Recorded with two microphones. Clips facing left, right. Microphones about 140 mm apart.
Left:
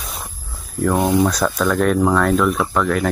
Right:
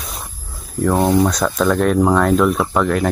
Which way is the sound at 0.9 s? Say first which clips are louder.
Right 2 dB; 10° right (ahead or behind).